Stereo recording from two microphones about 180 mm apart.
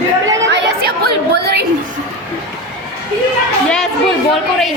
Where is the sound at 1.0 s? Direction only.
65° right (ahead or behind).